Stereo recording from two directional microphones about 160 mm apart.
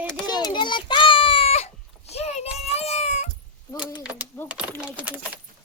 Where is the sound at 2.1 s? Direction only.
40° left (ahead or behind).